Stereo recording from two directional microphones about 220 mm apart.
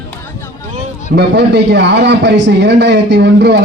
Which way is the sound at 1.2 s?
50° right (ahead or behind).